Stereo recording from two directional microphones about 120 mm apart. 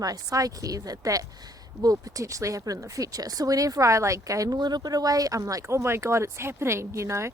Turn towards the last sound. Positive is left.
turn(degrees=-25)  # may be behind; listen again after turning